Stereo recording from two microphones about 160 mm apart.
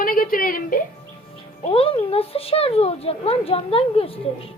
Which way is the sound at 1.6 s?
35° left (ahead or behind).